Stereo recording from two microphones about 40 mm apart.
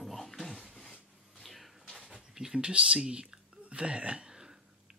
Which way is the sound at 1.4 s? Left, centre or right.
Centre.